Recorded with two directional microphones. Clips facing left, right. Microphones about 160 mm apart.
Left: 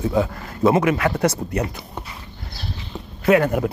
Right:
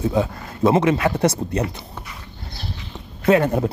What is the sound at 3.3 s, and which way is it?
Speech, 25° right (ahead or behind).